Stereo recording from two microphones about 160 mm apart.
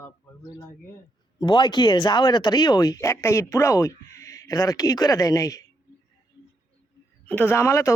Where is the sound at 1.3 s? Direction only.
30° left (ahead or behind).